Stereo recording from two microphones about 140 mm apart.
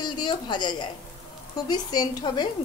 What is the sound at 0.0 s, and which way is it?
A woman's voice, 30° left (ahead or behind).